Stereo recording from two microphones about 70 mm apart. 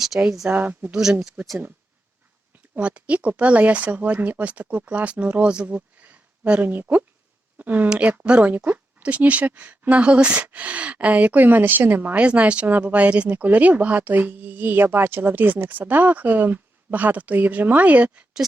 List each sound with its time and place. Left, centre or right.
0.1 s speech: right
2.7 s speech: centre